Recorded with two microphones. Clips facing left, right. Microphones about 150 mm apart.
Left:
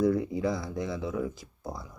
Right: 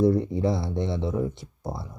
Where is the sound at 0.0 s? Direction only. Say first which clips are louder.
Right 4 dB; 25° right (ahead or behind).